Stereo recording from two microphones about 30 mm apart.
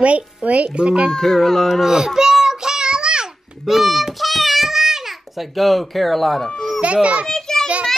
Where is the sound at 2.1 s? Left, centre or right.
Centre.